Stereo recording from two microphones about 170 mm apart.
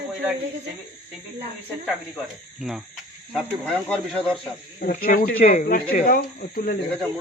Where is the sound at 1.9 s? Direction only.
Centre (ahead or behind).